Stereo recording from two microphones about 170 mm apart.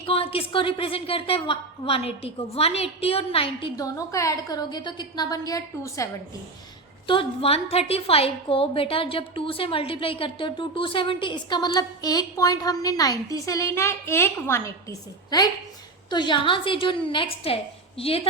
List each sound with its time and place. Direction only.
0.0 s a woman's voice: 35° left (ahead or behind)
3.8 s a woman's voice: 20° left (ahead or behind)
7.1 s a woman's voice: 30° left (ahead or behind)